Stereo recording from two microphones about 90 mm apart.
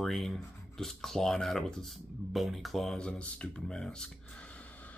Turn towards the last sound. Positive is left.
turn(degrees=10)  # may be behind; listen again after turning